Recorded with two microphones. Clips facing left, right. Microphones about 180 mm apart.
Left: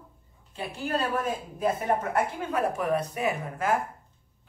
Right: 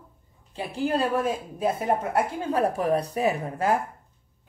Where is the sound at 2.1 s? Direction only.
35° right (ahead or behind).